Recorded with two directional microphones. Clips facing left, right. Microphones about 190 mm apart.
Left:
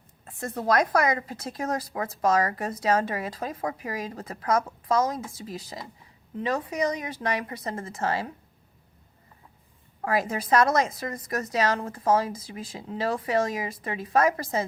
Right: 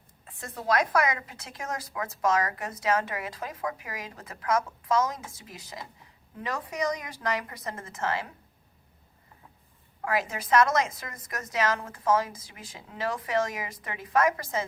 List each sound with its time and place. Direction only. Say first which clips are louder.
0.3 s a woman's voice: left 3 dB; 45° left (ahead or behind)
10.0 s speech: left 3 dB; 35° left (ahead or behind)